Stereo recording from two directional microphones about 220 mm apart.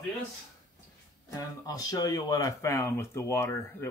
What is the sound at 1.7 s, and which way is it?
Speech, 15° left (ahead or behind).